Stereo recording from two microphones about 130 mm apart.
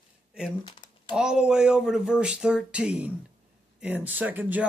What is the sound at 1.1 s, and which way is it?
Speech, 5° right (ahead or behind).